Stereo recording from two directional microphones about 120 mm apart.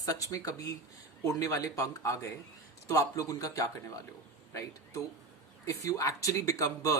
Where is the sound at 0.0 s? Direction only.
30° left (ahead or behind).